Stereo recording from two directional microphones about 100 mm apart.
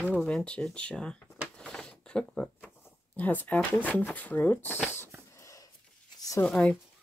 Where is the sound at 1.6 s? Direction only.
5° left (ahead or behind).